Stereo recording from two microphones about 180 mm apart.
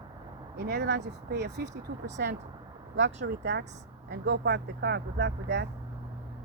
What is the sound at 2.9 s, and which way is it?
Speech, 90° right.